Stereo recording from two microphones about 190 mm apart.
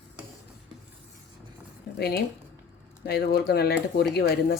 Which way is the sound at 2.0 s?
55° left (ahead or behind).